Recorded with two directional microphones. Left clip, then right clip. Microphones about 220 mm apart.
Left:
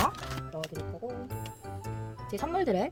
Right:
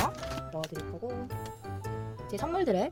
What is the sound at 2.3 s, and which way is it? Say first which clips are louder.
Speech: even; centre (ahead or behind).